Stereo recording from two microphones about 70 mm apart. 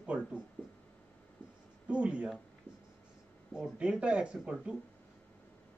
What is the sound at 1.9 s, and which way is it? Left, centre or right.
Speech, centre.